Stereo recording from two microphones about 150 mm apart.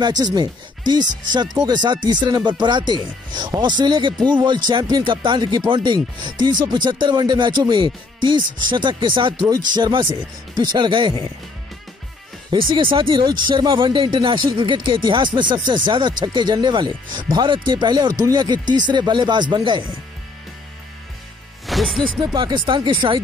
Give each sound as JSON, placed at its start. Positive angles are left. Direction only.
{"t": 0.0, "sound": "speech", "side_deg": -25}
{"t": 12.4, "sound": "speech", "side_deg": -30}
{"t": 21.6, "sound": "speech", "side_deg": 0}
{"t": 22.2, "sound": "speech", "side_deg": -30}